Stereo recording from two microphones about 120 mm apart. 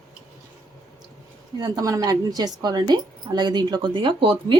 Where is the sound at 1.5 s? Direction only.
30° right (ahead or behind).